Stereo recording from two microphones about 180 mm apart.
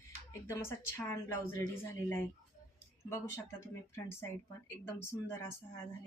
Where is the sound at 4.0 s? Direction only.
15° left (ahead or behind).